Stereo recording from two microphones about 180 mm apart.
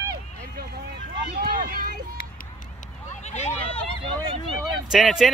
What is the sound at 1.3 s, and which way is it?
Run, 55° right (ahead or behind).